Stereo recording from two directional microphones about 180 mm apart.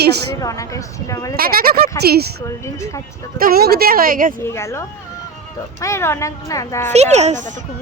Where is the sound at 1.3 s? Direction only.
55° right (ahead or behind).